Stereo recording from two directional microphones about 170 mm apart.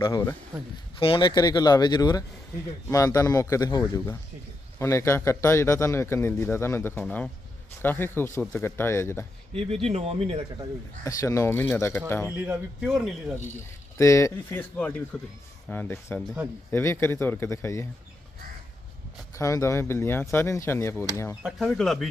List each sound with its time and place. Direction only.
0.0 s a man's voice: 15° left (ahead or behind)
0.9 s a man's voice: 30° left (ahead or behind); by 9.2 s 15° left (ahead or behind)
9.8 s speech: 35° right (ahead or behind)
11.0 s a man's voice: 20° left (ahead or behind)
12.5 s a man's voice: 5° right (ahead or behind)
14.0 s a man's voice: 20° left (ahead or behind)
19.3 s a man's voice: 15° left (ahead or behind)
21.4 s a man's voice: centre (ahead or behind)